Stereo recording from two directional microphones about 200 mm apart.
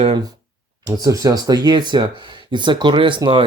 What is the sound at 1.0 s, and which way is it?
Speech, 15° right (ahead or behind).